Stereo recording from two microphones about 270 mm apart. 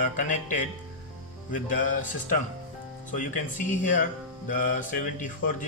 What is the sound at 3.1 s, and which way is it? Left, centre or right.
Speech, left.